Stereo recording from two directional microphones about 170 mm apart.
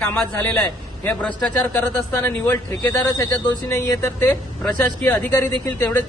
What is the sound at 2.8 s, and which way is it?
Speech, 25° left (ahead or behind).